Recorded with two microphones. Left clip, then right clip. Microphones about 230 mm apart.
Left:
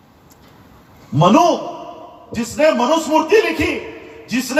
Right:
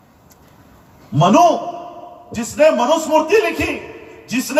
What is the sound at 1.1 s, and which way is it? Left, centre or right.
A man's voice, right.